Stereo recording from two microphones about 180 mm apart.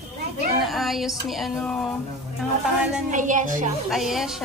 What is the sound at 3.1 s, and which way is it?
Speech, 45° right (ahead or behind).